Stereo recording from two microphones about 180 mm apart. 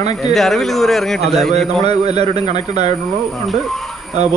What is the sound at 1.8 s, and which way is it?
Speech, 35° right (ahead or behind).